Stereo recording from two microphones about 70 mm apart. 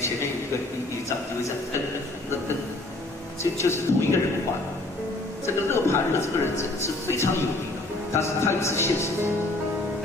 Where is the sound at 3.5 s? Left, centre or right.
Left.